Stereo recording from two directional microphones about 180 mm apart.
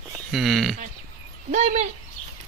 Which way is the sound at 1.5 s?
40° right (ahead or behind).